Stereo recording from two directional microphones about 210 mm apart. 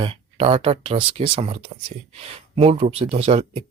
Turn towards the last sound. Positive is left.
turn(degrees=-25)  # may be behind; listen again after turning